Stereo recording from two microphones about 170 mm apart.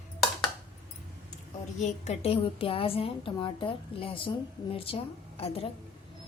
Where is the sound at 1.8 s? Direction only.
40° left (ahead or behind).